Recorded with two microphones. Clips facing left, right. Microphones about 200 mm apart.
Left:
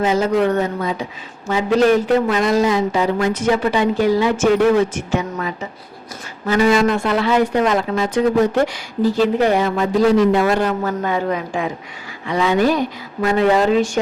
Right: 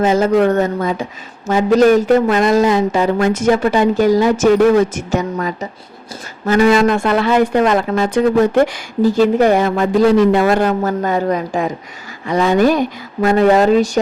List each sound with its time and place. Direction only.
0.0 s speech: 50° right (ahead or behind)
6.5 s speech: 55° right (ahead or behind); by 14.0 s 40° right (ahead or behind)